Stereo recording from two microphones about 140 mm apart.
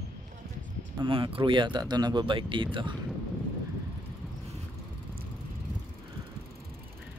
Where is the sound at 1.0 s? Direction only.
40° right (ahead or behind).